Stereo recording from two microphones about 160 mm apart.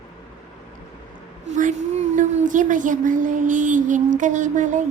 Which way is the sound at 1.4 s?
50° right (ahead or behind).